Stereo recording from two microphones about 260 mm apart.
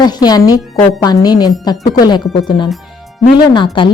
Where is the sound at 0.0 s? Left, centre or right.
Centre.